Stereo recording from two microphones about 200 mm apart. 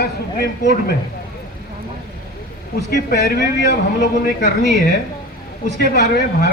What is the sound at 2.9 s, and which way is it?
Speech, 50° left (ahead or behind).